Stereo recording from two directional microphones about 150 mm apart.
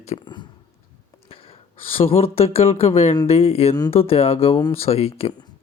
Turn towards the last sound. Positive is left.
turn(degrees=40)  # may be behind; listen again after turning